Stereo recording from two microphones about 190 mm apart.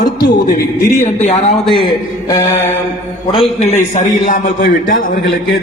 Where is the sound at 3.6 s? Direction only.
35° left (ahead or behind).